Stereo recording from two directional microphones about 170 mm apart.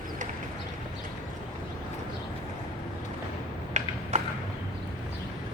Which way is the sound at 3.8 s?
40° right (ahead or behind).